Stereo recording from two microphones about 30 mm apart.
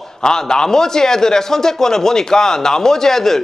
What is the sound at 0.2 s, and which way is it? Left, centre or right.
A man's voice, left.